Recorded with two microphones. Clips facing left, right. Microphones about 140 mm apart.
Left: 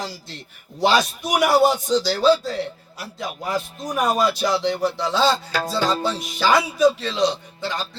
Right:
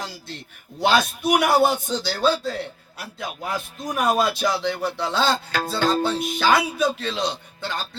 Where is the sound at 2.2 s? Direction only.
55° right (ahead or behind).